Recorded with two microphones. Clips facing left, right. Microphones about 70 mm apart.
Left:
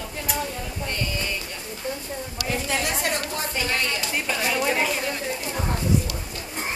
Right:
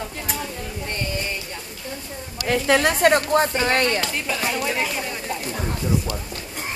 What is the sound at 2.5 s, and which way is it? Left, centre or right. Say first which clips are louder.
Speech: right 8 dB; right.